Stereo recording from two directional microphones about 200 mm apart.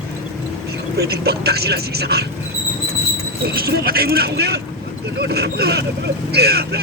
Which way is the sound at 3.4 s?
50° right (ahead or behind).